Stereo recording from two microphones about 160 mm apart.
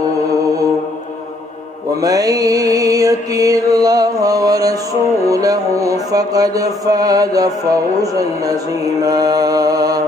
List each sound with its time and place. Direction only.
2.0 s mantra: 20° right (ahead or behind)
5.2 s music: 20° right (ahead or behind)